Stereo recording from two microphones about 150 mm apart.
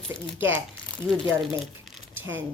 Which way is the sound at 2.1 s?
15° right (ahead or behind).